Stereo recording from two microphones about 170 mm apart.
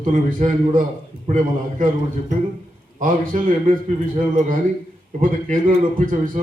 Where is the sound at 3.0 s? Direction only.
50° right (ahead or behind).